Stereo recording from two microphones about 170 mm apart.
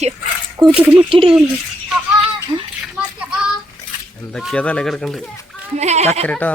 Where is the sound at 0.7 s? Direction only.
10° right (ahead or behind).